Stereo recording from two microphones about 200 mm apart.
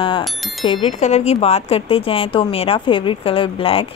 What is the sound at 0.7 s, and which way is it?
Speech, 25° left (ahead or behind).